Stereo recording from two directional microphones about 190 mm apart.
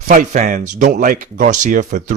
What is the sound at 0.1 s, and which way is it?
Speech, 40° right (ahead or behind).